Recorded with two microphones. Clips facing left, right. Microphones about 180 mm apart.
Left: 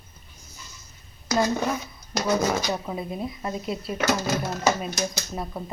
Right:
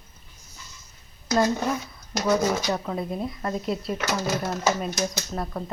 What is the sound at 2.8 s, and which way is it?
A woman's voice, 5° left (ahead or behind).